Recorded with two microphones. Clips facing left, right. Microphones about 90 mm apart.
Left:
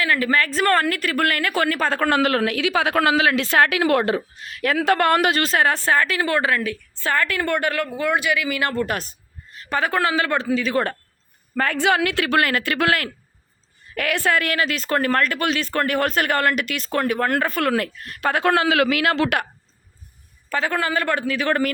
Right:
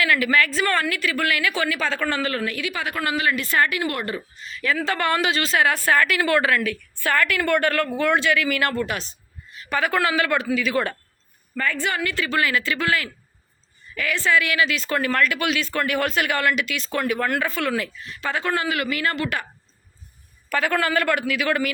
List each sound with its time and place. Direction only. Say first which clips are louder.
0.0 s a woman's voice: even; 35° left (ahead or behind)
8.9 s a man's voice: left 3 dB; 45° left (ahead or behind)
11.5 s a woman's voice: left 5 dB; 65° left (ahead or behind); by 19.5 s 80° left
20.5 s speech: right 1 dB; 25° left (ahead or behind)